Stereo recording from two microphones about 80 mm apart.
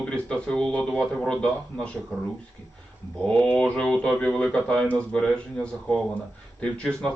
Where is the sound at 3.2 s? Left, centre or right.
Centre.